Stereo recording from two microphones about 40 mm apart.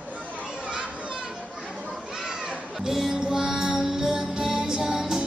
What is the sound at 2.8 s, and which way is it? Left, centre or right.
Music, centre.